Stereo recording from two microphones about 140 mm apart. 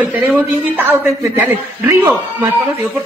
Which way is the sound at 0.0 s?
10° right (ahead or behind).